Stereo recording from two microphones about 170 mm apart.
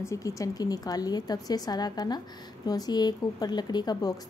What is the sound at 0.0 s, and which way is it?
A woman's voice, 20° left (ahead or behind).